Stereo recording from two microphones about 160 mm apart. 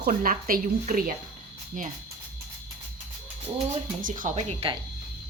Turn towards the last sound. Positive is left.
turn(degrees=-35)  # may be behind; listen again after turning